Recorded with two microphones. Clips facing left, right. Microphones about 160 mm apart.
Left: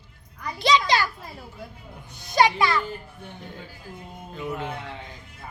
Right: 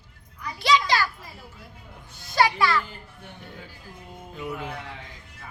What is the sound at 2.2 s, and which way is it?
Speech, 20° left (ahead or behind).